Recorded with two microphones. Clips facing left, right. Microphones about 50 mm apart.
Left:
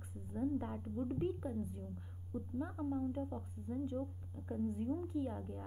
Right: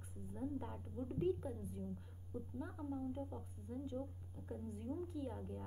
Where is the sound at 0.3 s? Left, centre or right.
Centre.